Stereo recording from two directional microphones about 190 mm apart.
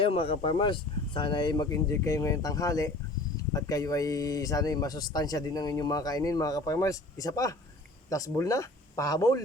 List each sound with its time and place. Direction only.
0.0 s speech: 30° left (ahead or behind)